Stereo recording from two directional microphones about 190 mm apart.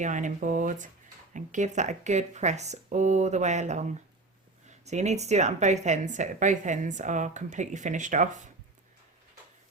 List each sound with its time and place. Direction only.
0.0 s a woman's voice: 40° right (ahead or behind)